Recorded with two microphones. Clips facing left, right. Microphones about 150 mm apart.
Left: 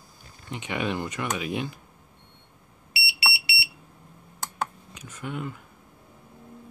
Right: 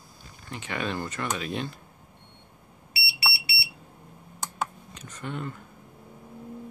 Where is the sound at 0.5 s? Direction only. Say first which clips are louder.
Left 2 dB; 15° left (ahead or behind).